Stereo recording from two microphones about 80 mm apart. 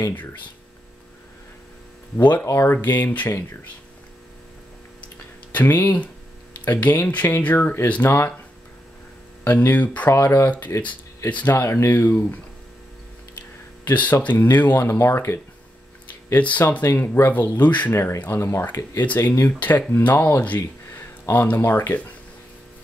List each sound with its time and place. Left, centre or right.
2.1 s speech: left
5.5 s speech: left
9.4 s speech: left
11.5 s speech: left
13.8 s speech: left
14.8 s speech: left
16.3 s speech: centre
17.9 s speech: left
19.0 s speech: left